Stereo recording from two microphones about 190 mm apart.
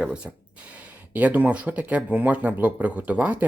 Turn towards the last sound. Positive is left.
turn(degrees=-10)  # may be behind; listen again after turning